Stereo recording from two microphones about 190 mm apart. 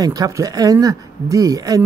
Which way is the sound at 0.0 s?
20° right (ahead or behind).